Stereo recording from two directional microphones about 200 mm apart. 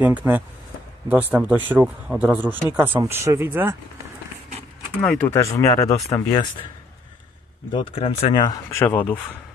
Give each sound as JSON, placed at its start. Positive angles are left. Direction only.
{"t": 0.0, "sound": "speech", "side_deg": -10}
{"t": 5.0, "sound": "speech", "side_deg": 5}
{"t": 5.4, "sound": "speech", "side_deg": 15}
{"t": 7.7, "sound": "speech", "side_deg": 25}
{"t": 8.7, "sound": "speech", "side_deg": 10}